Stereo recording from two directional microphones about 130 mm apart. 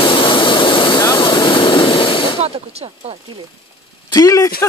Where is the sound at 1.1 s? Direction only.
40° left (ahead or behind).